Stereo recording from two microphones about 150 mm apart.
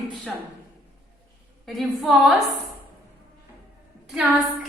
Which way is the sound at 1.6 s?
Centre (ahead or behind).